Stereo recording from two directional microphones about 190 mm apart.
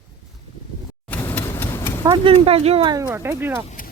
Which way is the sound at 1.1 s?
10° left (ahead or behind).